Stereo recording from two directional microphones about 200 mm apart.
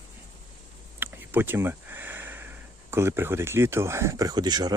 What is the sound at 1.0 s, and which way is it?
Speech, 10° right (ahead or behind).